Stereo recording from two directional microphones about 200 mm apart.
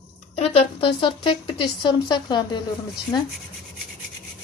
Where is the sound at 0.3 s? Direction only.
30° left (ahead or behind).